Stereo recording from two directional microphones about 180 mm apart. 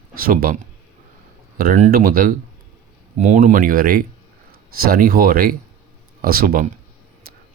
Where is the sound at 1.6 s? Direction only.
50° right (ahead or behind).